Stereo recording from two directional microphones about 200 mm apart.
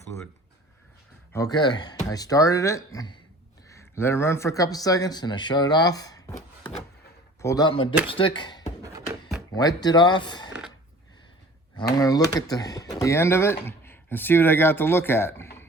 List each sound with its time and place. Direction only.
1.3 s speech: 15° left (ahead or behind)
11.9 s speech: 20° left (ahead or behind)